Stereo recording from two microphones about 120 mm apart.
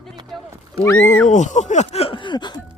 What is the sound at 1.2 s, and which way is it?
Speech, 85° left.